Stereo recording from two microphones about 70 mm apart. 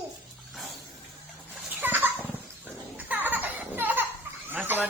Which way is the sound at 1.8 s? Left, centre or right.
Right.